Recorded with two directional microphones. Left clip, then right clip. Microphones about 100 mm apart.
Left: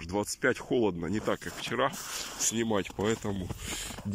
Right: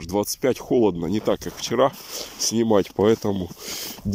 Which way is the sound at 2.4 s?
75° right (ahead or behind).